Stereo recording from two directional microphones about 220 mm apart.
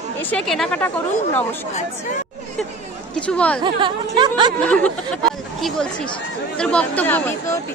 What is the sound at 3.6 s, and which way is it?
Speech, 20° right (ahead or behind).